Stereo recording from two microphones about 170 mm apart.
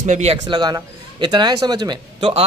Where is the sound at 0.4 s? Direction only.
25° right (ahead or behind).